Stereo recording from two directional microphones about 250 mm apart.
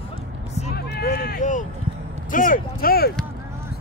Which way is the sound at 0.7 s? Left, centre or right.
Left.